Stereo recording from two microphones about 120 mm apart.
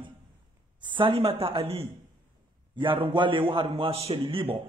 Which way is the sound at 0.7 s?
45° right (ahead or behind).